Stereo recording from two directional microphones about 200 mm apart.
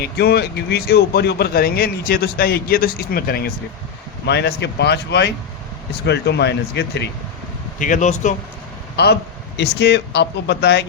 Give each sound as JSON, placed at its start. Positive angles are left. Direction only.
{"t": 0.0, "sound": "speech", "side_deg": 55}
{"t": 7.8, "sound": "speech", "side_deg": 40}
{"t": 9.6, "sound": "speech", "side_deg": 55}